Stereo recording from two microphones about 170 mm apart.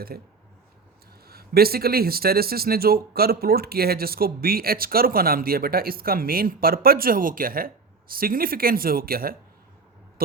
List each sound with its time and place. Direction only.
0.1 s speech: 60° right (ahead or behind)
1.3 s speech: 65° right (ahead or behind)